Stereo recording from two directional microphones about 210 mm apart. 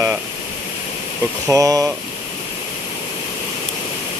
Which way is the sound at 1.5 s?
15° right (ahead or behind).